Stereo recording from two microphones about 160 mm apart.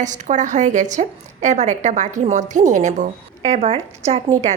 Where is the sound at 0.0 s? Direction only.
50° right (ahead or behind).